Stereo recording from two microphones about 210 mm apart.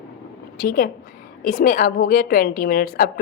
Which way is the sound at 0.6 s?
45° left (ahead or behind).